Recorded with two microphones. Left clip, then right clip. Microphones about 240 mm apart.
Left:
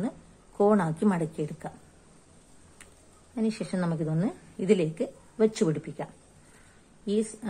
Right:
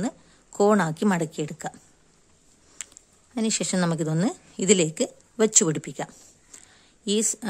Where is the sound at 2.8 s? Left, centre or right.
Right.